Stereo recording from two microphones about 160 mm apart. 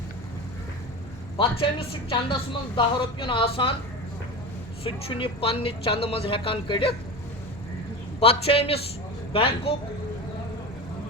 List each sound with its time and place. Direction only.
1.4 s a woman's voice: 35° left (ahead or behind)
4.8 s a woman's voice: 35° left (ahead or behind)
8.2 s a woman's voice: 35° left (ahead or behind)